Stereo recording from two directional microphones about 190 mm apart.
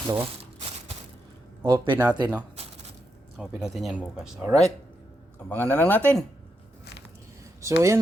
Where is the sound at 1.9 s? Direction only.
10° right (ahead or behind).